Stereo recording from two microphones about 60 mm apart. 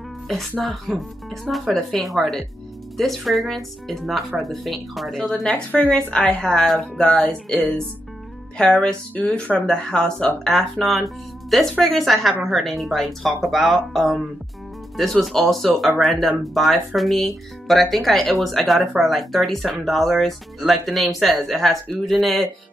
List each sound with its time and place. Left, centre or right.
0.3 s speech: centre
5.3 s speech: centre
6.6 s speech: centre
7.4 s speech: centre
9.1 s speech: left
9.7 s speech: centre